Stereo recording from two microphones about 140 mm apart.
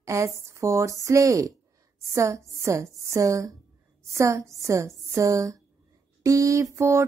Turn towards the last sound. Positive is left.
turn(degrees=-20)  # may be behind; listen again after turning